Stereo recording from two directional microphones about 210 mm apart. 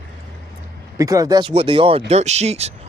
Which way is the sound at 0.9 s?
15° right (ahead or behind).